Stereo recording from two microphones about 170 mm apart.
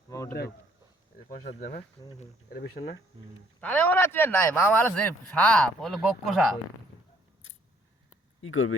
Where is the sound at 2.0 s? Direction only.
20° left (ahead or behind).